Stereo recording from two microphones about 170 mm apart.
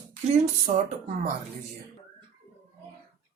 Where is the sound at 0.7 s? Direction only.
45° right (ahead or behind).